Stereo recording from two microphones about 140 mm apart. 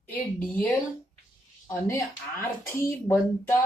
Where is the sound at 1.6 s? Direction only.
20° left (ahead or behind).